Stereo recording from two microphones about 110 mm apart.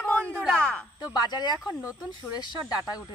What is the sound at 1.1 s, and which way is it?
A woman's voice, 40° left (ahead or behind).